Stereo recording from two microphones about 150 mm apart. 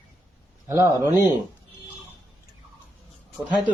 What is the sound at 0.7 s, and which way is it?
Speech, 15° right (ahead or behind).